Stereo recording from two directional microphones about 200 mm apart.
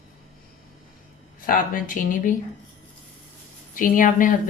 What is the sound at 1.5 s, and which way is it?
Speech, 40° left (ahead or behind).